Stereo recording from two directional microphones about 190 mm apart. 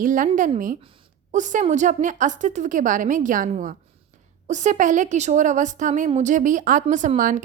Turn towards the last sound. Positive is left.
turn(degrees=-45)  # may be behind; listen again after turning